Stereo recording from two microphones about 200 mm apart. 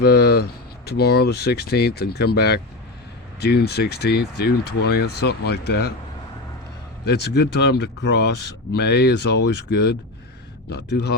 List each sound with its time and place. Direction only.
0.0 s speech: 55° left (ahead or behind)
7.0 s speech: 55° left (ahead or behind)